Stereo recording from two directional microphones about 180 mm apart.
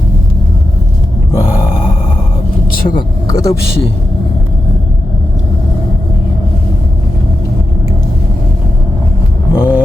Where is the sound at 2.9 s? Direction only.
25° left (ahead or behind).